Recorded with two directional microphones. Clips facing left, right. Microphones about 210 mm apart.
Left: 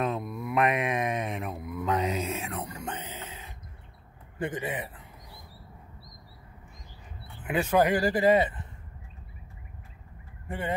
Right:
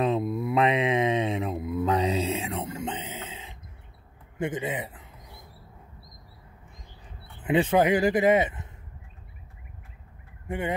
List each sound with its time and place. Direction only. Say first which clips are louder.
0.0 s mantra: right 5 dB; 25° right (ahead or behind)
4.4 s a sound: right 3 dB; 20° right (ahead or behind)
7.3 s speech: right 3 dB; 25° right (ahead or behind)